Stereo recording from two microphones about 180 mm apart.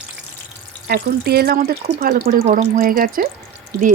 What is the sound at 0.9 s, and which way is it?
Speech, 60° right (ahead or behind).